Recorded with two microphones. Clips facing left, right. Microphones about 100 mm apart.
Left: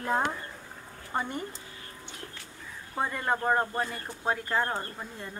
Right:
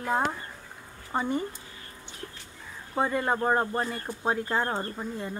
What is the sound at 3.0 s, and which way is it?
Speech, 15° right (ahead or behind).